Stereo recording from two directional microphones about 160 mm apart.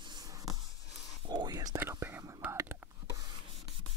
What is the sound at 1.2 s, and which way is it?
Whispering, 25° right (ahead or behind).